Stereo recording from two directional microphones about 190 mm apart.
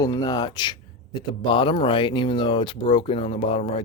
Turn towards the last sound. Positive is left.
turn(degrees=30)  # may be behind; listen again after turning